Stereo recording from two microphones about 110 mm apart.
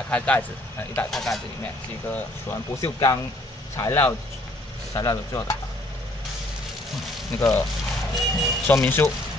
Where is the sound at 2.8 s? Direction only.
40° left (ahead or behind).